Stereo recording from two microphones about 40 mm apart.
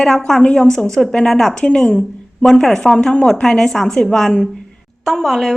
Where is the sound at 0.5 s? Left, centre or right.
Centre.